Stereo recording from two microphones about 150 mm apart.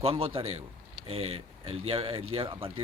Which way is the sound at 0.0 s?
40° right (ahead or behind).